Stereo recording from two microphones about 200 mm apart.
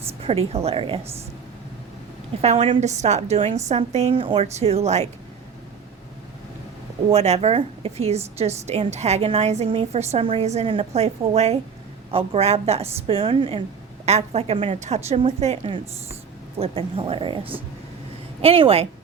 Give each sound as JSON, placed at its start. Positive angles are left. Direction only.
{"t": 0.2, "sound": "a woman's voice", "side_deg": -30}
{"t": 2.4, "sound": "a woman's voice", "side_deg": -30}
{"t": 7.1, "sound": "a woman's voice", "side_deg": -30}